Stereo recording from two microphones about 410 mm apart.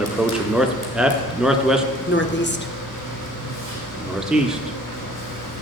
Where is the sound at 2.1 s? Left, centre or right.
Left.